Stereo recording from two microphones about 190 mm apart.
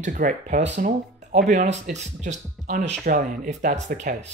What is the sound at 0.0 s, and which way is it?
Speech, 40° right (ahead or behind).